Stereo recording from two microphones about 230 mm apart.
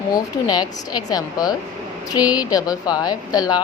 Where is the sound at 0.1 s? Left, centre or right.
Centre.